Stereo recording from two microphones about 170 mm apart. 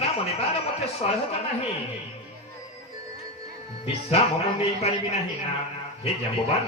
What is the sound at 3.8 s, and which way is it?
Speech, 35° left (ahead or behind).